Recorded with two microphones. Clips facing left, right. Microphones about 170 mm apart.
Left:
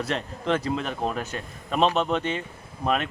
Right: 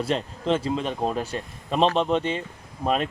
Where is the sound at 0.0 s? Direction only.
30° right (ahead or behind).